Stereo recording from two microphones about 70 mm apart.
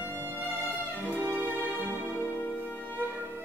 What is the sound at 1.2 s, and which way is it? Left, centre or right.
Music, right.